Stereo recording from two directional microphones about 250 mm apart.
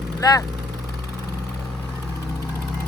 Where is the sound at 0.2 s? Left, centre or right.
Centre.